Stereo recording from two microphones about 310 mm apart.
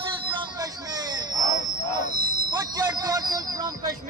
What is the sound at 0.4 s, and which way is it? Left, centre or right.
Hubbub, centre.